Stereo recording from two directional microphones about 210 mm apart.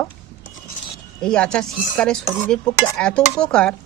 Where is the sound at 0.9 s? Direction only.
5° left (ahead or behind).